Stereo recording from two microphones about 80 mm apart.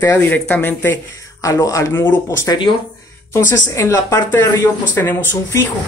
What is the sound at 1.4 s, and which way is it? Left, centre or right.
Speech, left.